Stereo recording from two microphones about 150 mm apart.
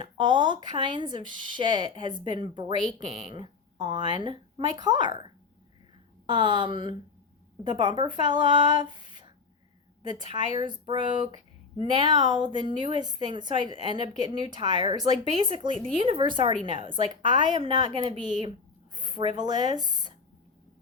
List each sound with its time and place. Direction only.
0.0 s speech: 30° right (ahead or behind)
10.3 s speech: 30° right (ahead or behind)
18.0 s a woman's voice: 45° right (ahead or behind)
18.9 s a sound: 30° right (ahead or behind)
19.4 s speech: 30° right (ahead or behind)